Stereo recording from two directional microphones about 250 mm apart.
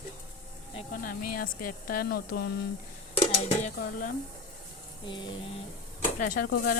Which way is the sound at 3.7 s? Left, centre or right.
Left.